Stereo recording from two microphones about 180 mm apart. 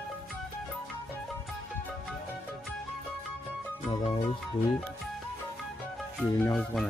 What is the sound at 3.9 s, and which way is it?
Music, 30° left (ahead or behind).